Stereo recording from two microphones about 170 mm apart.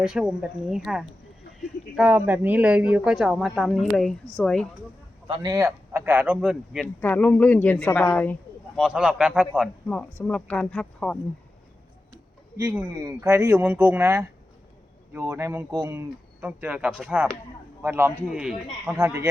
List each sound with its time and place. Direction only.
0.0 s a woman's voice: 5° right (ahead or behind)
5.3 s speech: 25° right (ahead or behind); by 6.8 s 5° right (ahead or behind)
6.8 s speech: 10° left (ahead or behind)
8.8 s a woman's voice: 5° right (ahead or behind)
9.9 s speech: 5° left (ahead or behind)
13.0 s a woman's voice: 20° right (ahead or behind)
18.9 s speech: 15° right (ahead or behind)